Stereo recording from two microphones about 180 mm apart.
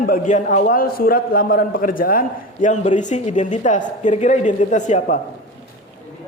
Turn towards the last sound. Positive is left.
turn(degrees=40)  # may be behind; listen again after turning